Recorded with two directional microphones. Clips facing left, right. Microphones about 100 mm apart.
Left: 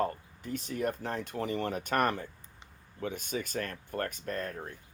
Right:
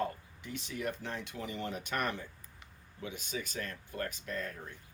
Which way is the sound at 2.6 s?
25° left (ahead or behind).